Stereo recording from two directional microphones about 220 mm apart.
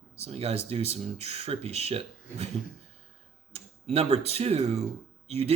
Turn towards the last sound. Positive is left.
turn(degrees=-30)  # may be behind; listen again after turning